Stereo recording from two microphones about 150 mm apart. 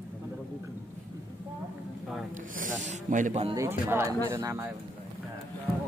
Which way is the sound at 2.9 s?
55° right (ahead or behind).